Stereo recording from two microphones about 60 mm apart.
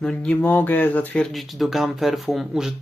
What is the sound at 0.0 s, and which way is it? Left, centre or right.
Speech, centre.